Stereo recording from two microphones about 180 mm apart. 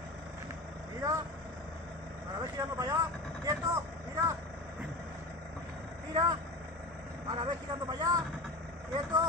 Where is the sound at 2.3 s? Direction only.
20° right (ahead or behind).